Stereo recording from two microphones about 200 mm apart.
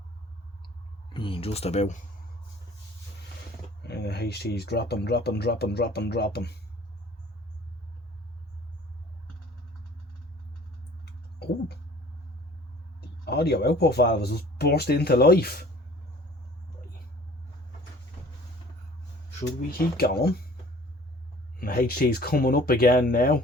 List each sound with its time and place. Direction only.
1.1 s speech: 25° left (ahead or behind)
3.8 s speech: 55° left (ahead or behind)
11.0 s a sound: 55° left (ahead or behind)
13.0 s speech: 55° left (ahead or behind)
20.0 s speech: 50° left (ahead or behind)
21.6 s speech: 50° left (ahead or behind)